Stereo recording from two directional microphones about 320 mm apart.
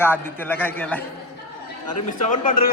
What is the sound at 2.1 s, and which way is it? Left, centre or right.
Speech, left.